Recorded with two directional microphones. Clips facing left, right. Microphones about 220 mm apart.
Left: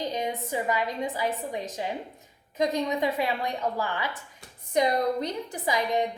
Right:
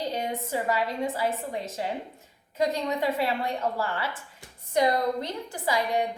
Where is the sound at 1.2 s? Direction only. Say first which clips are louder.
Right 1 dB; 15° left (ahead or behind).